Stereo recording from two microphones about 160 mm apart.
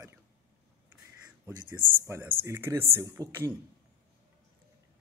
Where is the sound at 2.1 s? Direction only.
15° right (ahead or behind).